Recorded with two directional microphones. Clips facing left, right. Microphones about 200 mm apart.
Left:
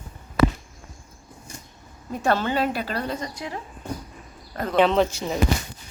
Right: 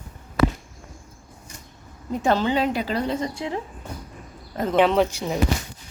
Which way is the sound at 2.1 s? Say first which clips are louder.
Right 2 dB; 20° right (ahead or behind).